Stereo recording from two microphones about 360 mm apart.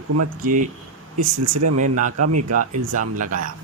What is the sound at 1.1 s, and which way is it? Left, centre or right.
Speech, right.